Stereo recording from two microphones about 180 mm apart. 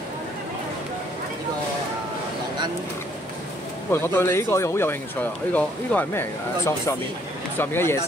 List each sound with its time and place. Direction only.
3.9 s speech: 10° left (ahead or behind)